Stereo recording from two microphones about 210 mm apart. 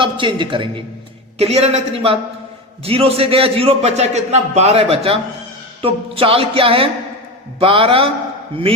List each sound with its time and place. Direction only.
0.0 s a man's voice: 25° right (ahead or behind)